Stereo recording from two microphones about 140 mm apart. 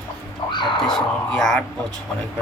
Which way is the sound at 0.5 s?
35° left (ahead or behind).